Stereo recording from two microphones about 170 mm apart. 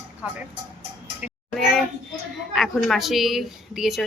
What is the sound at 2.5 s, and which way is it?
A woman's voice, centre (ahead or behind).